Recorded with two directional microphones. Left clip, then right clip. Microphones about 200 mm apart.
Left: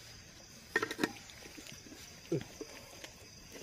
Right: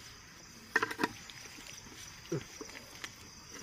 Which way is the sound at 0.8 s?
5° left (ahead or behind).